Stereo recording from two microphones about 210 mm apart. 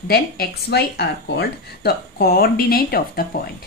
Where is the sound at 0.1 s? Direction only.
50° left (ahead or behind).